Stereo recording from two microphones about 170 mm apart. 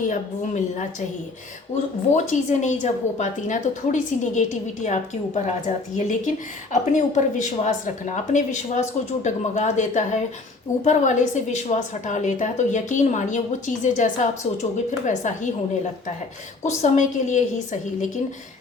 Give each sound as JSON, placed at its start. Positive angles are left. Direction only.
{"t": 0.1, "sound": "a woman's voice", "side_deg": 45}
{"t": 2.1, "sound": "a woman's voice", "side_deg": 45}
{"t": 16.6, "sound": "a woman's voice", "side_deg": 45}